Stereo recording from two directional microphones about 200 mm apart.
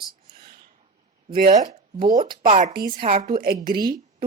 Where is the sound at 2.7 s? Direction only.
45° right (ahead or behind).